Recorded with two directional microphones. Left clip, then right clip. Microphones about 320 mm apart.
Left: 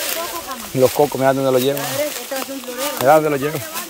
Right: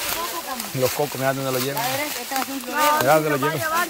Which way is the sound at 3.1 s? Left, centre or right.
Centre.